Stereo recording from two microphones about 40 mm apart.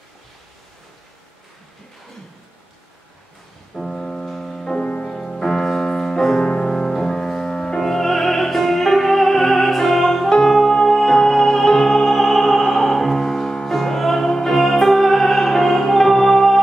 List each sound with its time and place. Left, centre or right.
3.7 s music: centre